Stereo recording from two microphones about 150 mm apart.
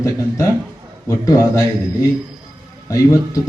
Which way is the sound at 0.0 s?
20° left (ahead or behind).